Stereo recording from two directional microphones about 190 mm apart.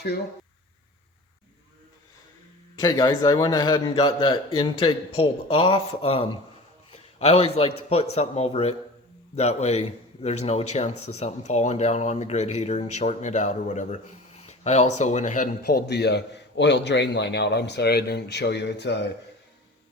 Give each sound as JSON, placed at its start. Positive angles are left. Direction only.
{"t": 2.7, "sound": "a man's voice", "side_deg": 20}